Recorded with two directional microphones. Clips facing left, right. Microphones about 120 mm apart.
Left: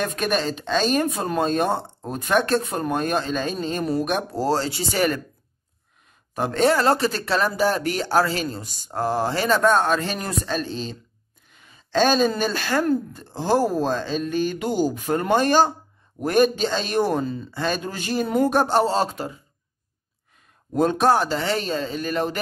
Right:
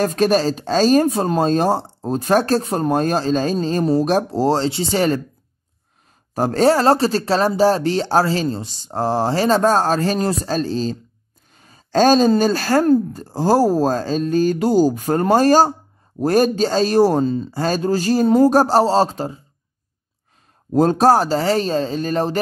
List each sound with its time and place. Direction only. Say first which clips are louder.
0.0 s speech: right 7 dB; 35° right (ahead or behind)
6.3 s speech: right 4 dB; 35° right (ahead or behind)
20.7 s speech: right 5 dB; 35° right (ahead or behind)